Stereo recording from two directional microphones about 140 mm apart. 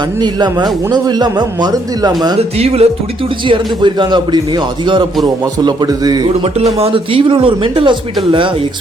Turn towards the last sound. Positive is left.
turn(degrees=-40)  # may be behind; listen again after turning